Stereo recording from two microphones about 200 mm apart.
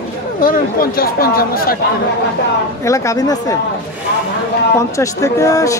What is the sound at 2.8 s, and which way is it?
Speech, 15° left (ahead or behind).